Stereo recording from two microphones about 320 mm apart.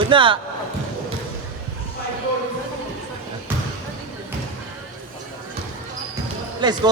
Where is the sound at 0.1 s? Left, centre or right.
Centre.